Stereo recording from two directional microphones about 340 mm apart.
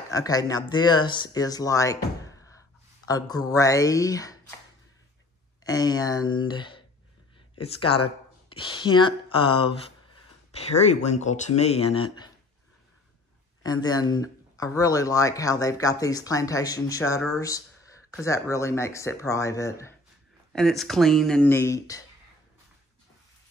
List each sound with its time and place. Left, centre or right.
0.1 s speech: centre
3.1 s speech: centre
5.6 s speech: centre
13.6 s speech: centre